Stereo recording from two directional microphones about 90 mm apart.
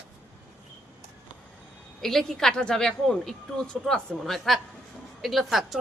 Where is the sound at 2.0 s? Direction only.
5° left (ahead or behind).